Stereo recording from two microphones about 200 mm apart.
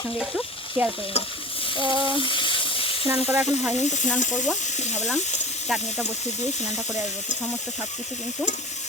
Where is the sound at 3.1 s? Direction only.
15° right (ahead or behind).